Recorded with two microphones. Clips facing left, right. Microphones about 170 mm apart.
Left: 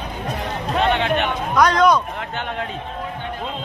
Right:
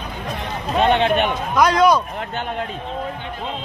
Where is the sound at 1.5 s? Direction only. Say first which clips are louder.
Even; 5° right (ahead or behind).